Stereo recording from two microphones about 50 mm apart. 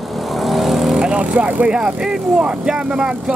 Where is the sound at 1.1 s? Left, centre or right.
Right.